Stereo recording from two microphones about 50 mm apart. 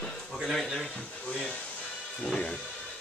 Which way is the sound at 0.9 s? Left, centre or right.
Centre.